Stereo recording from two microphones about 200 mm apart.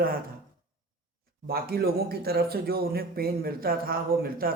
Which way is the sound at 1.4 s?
50° right (ahead or behind).